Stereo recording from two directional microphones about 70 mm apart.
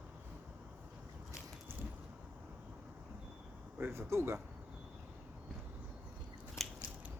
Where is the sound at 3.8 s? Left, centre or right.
Right.